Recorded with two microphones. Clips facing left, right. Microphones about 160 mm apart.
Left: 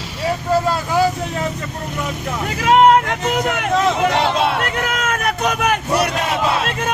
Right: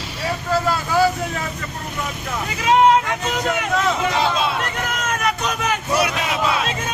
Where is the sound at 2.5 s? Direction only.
60° left (ahead or behind).